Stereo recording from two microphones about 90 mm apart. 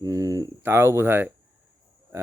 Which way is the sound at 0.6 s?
25° right (ahead or behind).